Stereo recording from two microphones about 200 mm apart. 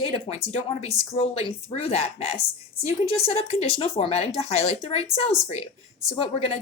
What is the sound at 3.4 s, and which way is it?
Speech, 20° right (ahead or behind).